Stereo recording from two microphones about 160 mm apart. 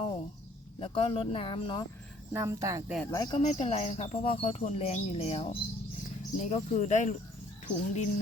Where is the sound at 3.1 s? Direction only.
25° left (ahead or behind).